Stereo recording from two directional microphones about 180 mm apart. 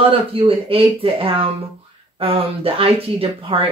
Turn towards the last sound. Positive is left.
turn(degrees=-30)  # may be behind; listen again after turning